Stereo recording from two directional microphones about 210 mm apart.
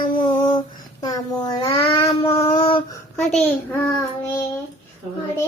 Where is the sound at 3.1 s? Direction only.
5° left (ahead or behind).